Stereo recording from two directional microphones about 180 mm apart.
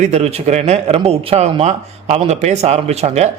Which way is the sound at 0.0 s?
35° right (ahead or behind).